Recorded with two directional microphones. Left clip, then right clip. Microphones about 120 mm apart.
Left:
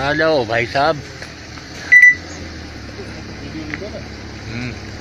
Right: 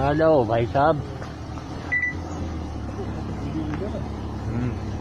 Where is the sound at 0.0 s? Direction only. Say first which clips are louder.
Left 3 dB; 30° left (ahead or behind).